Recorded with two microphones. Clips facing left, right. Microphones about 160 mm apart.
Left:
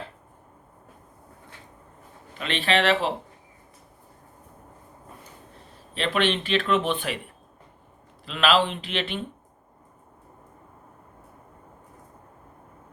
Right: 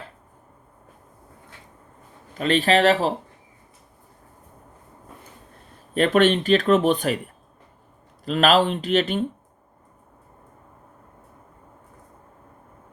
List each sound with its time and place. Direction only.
2.4 s speech: 40° right (ahead or behind)
5.9 s speech: 45° right (ahead or behind)
8.2 s speech: 45° right (ahead or behind)